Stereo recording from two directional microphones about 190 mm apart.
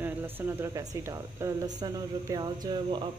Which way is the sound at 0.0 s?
10° right (ahead or behind).